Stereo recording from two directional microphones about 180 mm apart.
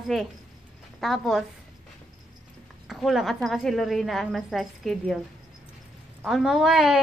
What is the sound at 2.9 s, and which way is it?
A woman's voice, centre (ahead or behind).